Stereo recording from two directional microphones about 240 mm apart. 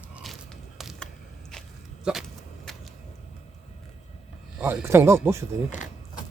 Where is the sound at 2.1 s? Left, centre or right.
Centre.